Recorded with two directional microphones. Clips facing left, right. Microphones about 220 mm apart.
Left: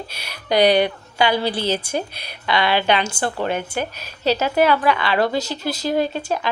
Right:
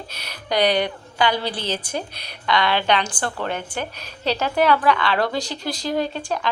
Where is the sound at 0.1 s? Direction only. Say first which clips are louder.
Left 4 dB; 10° left (ahead or behind).